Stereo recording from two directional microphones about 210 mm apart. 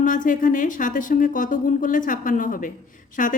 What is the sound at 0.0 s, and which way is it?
A woman's voice, 40° left (ahead or behind).